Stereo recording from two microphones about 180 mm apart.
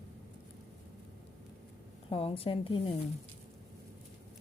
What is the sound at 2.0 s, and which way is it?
Speech, 30° left (ahead or behind).